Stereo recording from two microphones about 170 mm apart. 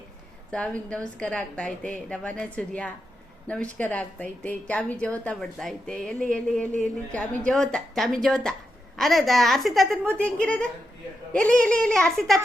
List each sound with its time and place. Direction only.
0.5 s a woman's voice: 5° left (ahead or behind)